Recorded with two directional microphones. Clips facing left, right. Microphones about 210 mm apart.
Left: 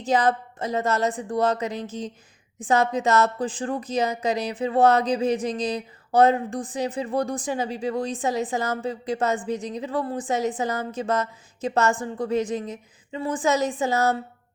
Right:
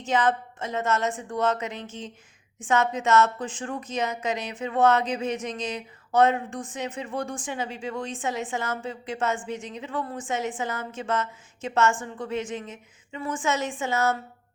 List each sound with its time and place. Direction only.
0.0 s speech: 35° left (ahead or behind)